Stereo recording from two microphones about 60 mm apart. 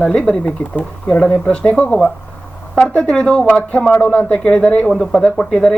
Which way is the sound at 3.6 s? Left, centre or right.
Left.